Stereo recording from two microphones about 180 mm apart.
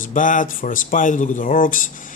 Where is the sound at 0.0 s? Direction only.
45° left (ahead or behind).